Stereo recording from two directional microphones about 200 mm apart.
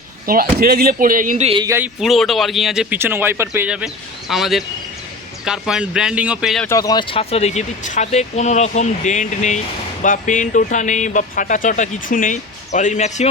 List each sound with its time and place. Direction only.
0.3 s speech: 45° right (ahead or behind)
1.5 s speech: 25° right (ahead or behind)
1.7 s speech: 5° right (ahead or behind)
6.7 s speech: 15° left (ahead or behind); by 13.2 s 35° left (ahead or behind)